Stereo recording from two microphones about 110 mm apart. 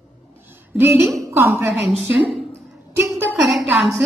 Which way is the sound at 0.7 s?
20° right (ahead or behind).